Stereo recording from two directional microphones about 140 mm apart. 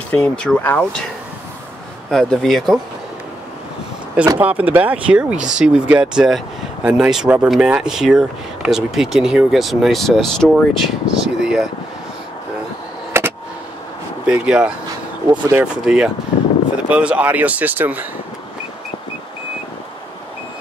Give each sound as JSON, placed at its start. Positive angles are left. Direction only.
{"t": 0.1, "sound": "speech", "side_deg": 10}
{"t": 2.0, "sound": "speech", "side_deg": 5}
{"t": 4.4, "sound": "speech", "side_deg": -10}
{"t": 13.1, "sound": "a sound", "side_deg": -15}
{"t": 14.2, "sound": "speech", "side_deg": -5}